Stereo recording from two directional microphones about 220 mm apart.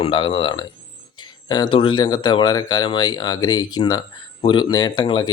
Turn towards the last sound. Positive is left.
turn(degrees=20)  # may be behind; listen again after turning